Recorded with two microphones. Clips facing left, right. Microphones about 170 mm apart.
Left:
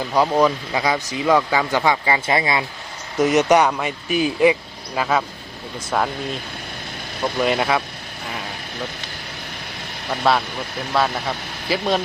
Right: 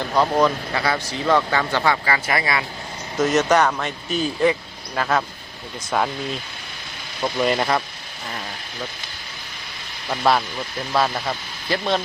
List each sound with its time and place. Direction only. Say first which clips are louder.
0.1 s speech: left 1 dB; 10° left (ahead or behind)
7.3 s speech: left 1 dB; 5° left (ahead or behind)
10.1 s speech: even; centre (ahead or behind)